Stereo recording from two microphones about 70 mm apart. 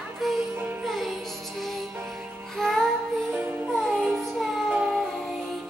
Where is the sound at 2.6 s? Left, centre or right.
Centre.